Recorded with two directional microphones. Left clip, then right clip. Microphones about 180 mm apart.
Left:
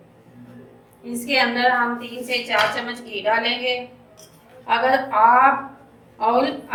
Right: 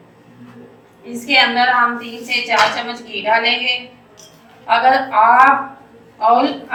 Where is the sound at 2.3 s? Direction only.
55° left (ahead or behind).